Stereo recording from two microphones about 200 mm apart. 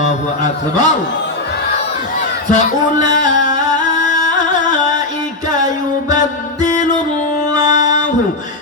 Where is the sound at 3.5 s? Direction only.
40° left (ahead or behind).